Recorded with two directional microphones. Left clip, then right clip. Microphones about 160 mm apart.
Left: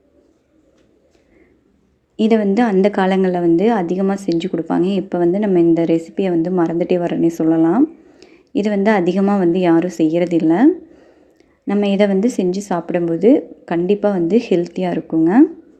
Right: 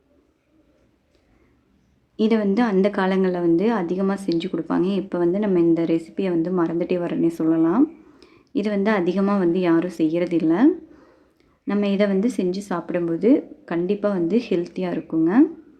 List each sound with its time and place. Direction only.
2.1 s a woman's voice: 20° left (ahead or behind)